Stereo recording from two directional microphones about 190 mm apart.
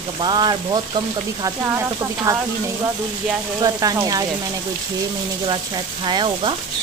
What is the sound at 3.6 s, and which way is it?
Speech, 20° right (ahead or behind).